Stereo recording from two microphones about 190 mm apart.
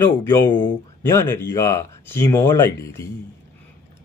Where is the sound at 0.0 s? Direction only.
15° left (ahead or behind).